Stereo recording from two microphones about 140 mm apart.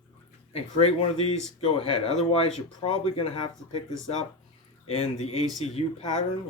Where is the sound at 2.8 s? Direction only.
40° left (ahead or behind).